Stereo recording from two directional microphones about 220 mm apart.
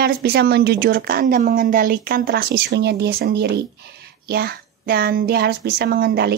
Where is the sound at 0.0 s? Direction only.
45° right (ahead or behind).